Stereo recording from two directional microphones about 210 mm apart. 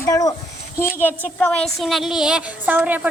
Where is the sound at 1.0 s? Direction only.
5° left (ahead or behind).